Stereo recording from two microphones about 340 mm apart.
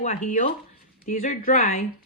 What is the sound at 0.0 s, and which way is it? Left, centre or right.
Speech, left.